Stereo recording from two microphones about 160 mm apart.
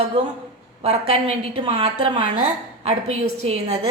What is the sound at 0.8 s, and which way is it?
A woman's voice, 40° right (ahead or behind).